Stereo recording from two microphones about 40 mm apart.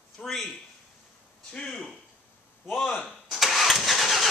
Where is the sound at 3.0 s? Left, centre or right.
Centre.